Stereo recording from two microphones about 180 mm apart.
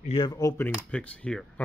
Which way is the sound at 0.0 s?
30° left (ahead or behind).